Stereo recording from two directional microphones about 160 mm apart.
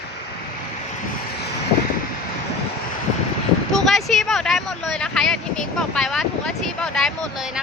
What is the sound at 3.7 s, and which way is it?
Speech, centre (ahead or behind).